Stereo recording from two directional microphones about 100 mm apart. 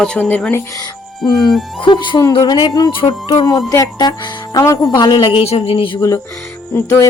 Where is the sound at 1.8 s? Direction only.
50° left (ahead or behind).